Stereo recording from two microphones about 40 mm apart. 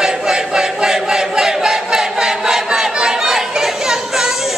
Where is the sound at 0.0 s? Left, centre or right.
Centre.